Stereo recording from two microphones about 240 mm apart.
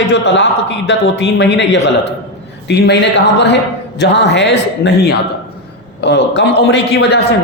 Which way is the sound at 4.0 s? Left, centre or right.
Left.